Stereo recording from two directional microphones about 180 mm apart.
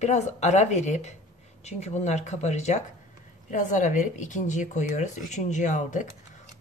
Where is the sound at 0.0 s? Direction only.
40° left (ahead or behind).